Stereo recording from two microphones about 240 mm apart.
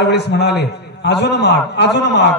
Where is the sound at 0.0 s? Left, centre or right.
Left.